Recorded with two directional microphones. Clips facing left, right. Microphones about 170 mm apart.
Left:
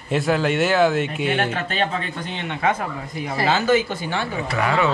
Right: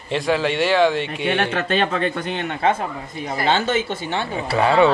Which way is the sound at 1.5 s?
70° right (ahead or behind).